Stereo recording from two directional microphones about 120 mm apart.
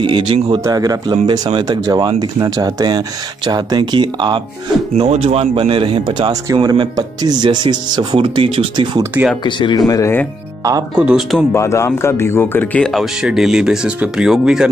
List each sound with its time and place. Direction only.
0.0 s speech: 45° right (ahead or behind)
0.7 s speech: 30° right (ahead or behind)
4.9 s speech: 60° right (ahead or behind); by 9.0 s 45° right (ahead or behind)
9.4 s speech: 40° left (ahead or behind)
11.0 s speech: 10° right (ahead or behind)
11.5 s speech: 25° left (ahead or behind)
12.8 s speech: centre (ahead or behind)